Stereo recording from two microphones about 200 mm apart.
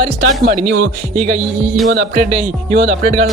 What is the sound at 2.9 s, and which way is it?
Speech, 50° right (ahead or behind).